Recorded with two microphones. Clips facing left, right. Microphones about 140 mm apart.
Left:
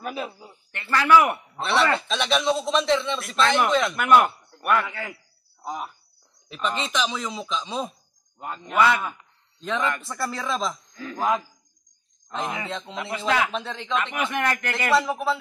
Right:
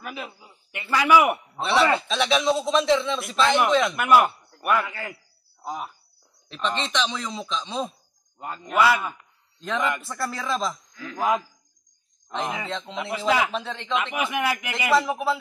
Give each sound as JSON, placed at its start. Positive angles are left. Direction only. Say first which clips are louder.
{"t": 0.0, "sound": "speech", "louder": "left 4 dB", "side_deg": 40}
{"t": 0.7, "sound": "a man's voice", "louder": "even", "side_deg": -10}